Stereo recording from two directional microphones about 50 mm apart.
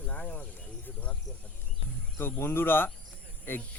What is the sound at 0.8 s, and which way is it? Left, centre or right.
Speech, left.